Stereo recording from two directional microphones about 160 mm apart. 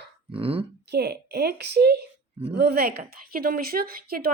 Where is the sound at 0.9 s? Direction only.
90° right.